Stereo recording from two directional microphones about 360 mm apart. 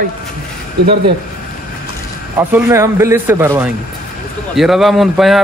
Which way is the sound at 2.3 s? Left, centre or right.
Centre.